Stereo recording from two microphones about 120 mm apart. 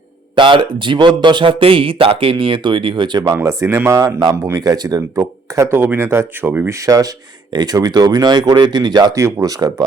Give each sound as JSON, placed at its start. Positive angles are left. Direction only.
{"t": 0.3, "sound": "speech", "side_deg": -45}
{"t": 3.3, "sound": "speech", "side_deg": -25}
{"t": 6.8, "sound": "speech", "side_deg": -30}